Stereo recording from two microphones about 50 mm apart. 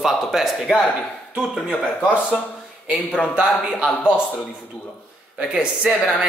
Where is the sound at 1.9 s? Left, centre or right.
Left.